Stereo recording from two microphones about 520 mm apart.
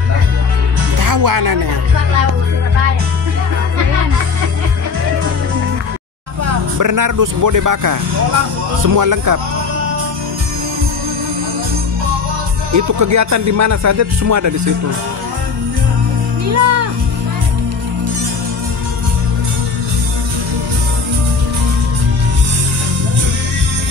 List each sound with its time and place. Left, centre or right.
0.9 s speech: right
6.4 s speech: right
12.7 s speech: right
16.4 s music: right